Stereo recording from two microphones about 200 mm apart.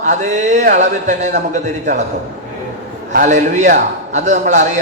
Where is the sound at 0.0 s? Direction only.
35° right (ahead or behind).